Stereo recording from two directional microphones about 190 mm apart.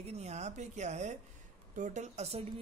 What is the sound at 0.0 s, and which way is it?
Speech, 35° right (ahead or behind).